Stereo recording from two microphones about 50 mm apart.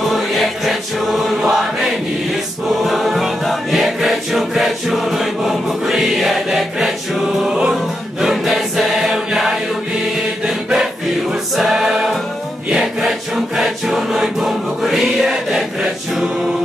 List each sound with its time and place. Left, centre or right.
0.1 s music: centre
2.8 s choir: centre
7.5 s music: centre
10.4 s choir: centre
13.6 s choir: centre